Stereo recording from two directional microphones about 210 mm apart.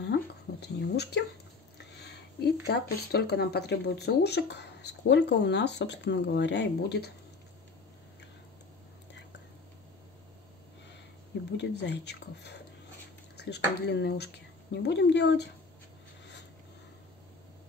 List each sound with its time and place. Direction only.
0.0 s a sound: 55° left (ahead or behind)
2.6 s speech: 50° left (ahead or behind)
11.5 s speech: 55° left (ahead or behind)